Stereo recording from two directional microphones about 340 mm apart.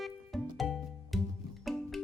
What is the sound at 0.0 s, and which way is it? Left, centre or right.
Music, centre.